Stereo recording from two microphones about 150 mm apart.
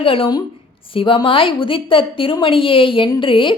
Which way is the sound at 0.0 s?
35° left (ahead or behind).